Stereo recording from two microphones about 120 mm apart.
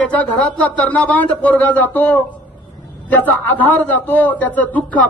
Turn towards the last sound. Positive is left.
turn(degrees=10)  # may be behind; listen again after turning